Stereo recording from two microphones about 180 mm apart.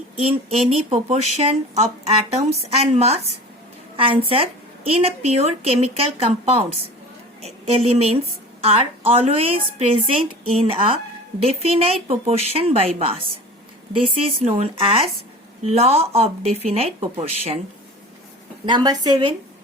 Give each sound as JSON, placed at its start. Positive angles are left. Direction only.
{"t": 0.2, "sound": "a woman's voice", "side_deg": -35}
{"t": 18.6, "sound": "a woman's voice", "side_deg": -25}